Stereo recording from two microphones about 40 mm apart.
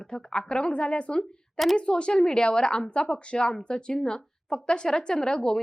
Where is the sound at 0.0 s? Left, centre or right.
Left.